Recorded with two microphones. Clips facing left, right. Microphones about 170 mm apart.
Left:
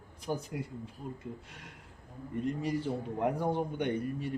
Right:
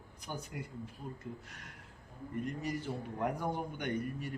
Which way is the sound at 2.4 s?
30° left (ahead or behind).